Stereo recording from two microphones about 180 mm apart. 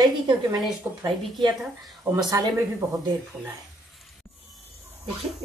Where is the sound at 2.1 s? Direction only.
20° right (ahead or behind).